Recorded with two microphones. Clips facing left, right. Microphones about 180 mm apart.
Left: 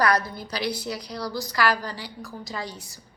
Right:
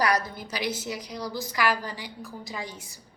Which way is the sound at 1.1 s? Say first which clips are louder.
Left 2 dB; 15° right (ahead or behind).